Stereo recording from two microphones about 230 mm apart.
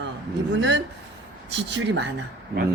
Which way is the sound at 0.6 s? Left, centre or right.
Right.